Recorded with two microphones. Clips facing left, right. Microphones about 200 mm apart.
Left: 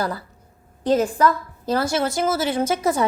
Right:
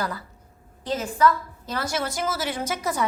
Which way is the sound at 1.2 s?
30° left (ahead or behind).